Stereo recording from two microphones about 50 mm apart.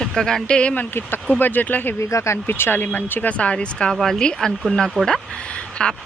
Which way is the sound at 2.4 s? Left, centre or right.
Left.